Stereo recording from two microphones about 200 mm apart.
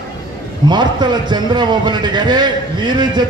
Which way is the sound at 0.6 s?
20° right (ahead or behind).